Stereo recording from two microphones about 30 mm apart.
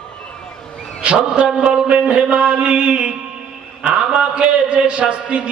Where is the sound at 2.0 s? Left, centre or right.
Right.